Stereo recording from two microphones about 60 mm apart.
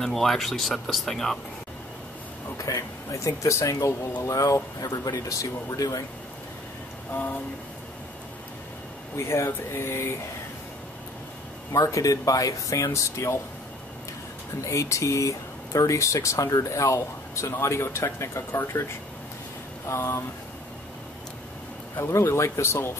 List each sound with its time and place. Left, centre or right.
0.0 s speech: centre
2.5 s speech: left
4.2 s speech: left
7.1 s a sound: left
9.1 s speech: left
11.7 s speech: left
14.6 s speech: left
19.9 s speech: left
21.9 s speech: left